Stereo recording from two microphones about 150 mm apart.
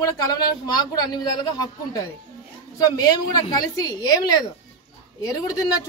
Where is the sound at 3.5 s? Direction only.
25° left (ahead or behind).